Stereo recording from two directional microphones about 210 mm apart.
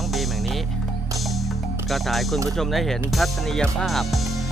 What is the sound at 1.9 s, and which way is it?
Speech, centre (ahead or behind).